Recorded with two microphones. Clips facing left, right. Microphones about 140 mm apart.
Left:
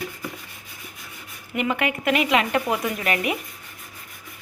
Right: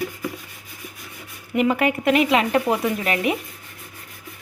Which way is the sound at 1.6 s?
35° right (ahead or behind).